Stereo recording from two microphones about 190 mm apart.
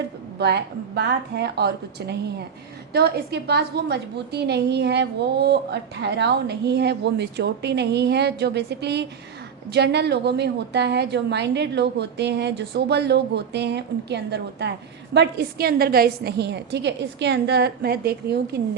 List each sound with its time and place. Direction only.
0.3 s a woman's voice: 60° right (ahead or behind)